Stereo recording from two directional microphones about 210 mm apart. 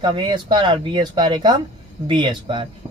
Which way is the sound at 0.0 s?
20° right (ahead or behind).